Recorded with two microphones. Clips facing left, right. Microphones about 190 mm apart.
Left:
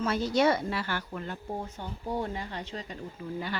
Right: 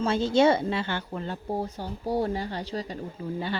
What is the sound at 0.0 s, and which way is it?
A woman's voice, 25° right (ahead or behind).